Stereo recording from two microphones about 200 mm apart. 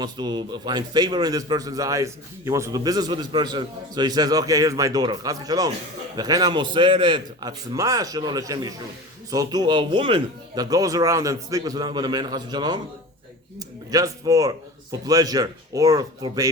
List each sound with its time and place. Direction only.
0.0 s a man's voice: 20° right (ahead or behind)